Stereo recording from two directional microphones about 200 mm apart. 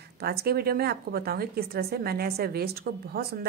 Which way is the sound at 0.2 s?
50° right (ahead or behind).